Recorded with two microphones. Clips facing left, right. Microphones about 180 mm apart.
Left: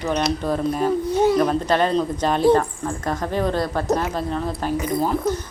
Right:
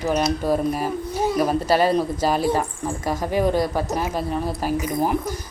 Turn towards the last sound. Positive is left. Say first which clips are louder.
# even
turn(degrees=-10)  # may be behind; listen again after turning